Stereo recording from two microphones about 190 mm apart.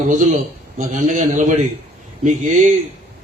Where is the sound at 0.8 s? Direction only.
40° right (ahead or behind).